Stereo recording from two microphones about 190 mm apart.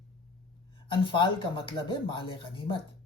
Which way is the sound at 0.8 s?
25° left (ahead or behind).